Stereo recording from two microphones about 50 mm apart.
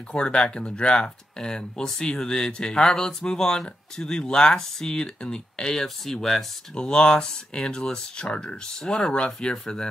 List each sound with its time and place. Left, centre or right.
0.1 s speech: centre
6.7 s speech: centre